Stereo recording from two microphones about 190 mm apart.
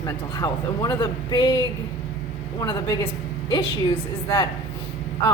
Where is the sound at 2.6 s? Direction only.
20° left (ahead or behind).